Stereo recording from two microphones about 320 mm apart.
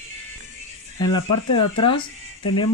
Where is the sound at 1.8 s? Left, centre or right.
Centre.